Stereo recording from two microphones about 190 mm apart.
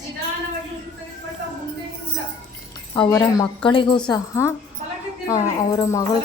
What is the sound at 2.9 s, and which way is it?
A woman's voice, 20° left (ahead or behind).